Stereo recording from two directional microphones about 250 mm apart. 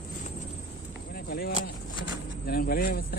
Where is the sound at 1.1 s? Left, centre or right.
Left.